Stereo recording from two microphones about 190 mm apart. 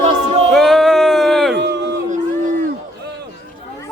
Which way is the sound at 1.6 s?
65° right (ahead or behind).